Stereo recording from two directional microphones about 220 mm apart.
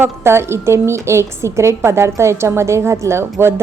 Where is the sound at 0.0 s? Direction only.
10° right (ahead or behind).